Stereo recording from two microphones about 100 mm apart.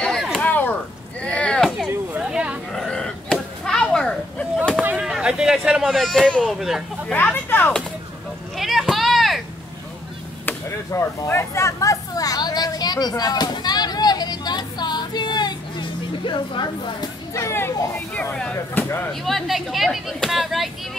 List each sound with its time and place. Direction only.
0.0 s chop: 5° left (ahead or behind)
0.5 s chop: 15° left (ahead or behind)
1.2 s a sound: 10° left (ahead or behind)
2.1 s a sound: 10° right (ahead or behind)
2.7 s children playing: 5° left (ahead or behind)
4.9 s speech: 5° right (ahead or behind)
7.1 s speech: 20° left (ahead or behind)
8.5 s vehicle: centre (ahead or behind)
10.9 s a sound: 25° left (ahead or behind); by 17.1 s 50° left (ahead or behind)
17.3 s speech: 30° left (ahead or behind); by 18.9 s 15° left (ahead or behind)
19.2 s speech: centre (ahead or behind)